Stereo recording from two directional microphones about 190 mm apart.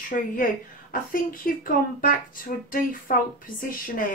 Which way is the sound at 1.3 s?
45° left (ahead or behind).